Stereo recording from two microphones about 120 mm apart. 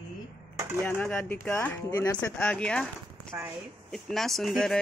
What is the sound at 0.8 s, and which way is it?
Speech, 15° left (ahead or behind).